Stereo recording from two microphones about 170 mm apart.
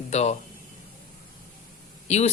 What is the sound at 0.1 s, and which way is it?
Speech, 40° left (ahead or behind).